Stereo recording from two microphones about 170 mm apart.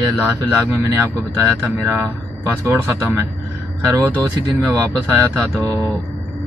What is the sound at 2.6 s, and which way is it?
Speech, 15° right (ahead or behind).